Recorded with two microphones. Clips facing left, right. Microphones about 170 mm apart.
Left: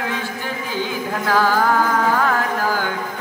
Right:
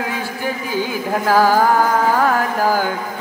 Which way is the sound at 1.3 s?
40° right (ahead or behind).